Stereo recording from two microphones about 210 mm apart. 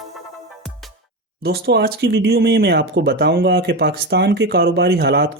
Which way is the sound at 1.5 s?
50° right (ahead or behind).